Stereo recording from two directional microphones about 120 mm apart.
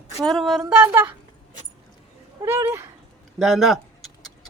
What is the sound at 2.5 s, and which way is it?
Speech, 20° right (ahead or behind).